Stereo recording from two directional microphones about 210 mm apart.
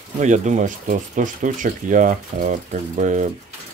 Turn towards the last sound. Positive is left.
turn(degrees=-35)  # may be behind; listen again after turning